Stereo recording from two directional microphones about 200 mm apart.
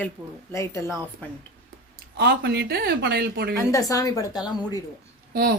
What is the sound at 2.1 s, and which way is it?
Speech, 55° right (ahead or behind).